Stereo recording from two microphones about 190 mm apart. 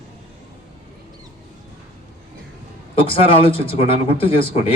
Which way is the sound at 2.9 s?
30° left (ahead or behind).